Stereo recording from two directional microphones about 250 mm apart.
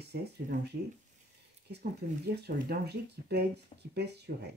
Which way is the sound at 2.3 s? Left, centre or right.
Right.